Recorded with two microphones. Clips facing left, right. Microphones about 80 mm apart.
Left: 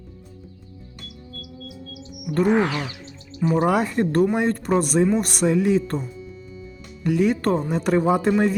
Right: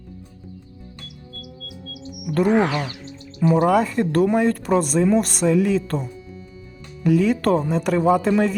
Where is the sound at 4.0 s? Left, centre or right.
Left.